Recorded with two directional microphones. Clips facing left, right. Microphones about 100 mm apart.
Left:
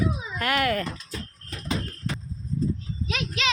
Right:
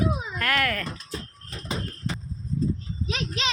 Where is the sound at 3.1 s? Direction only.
30° right (ahead or behind).